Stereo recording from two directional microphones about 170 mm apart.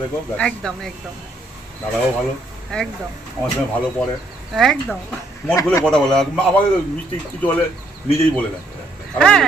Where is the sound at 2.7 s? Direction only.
5° left (ahead or behind).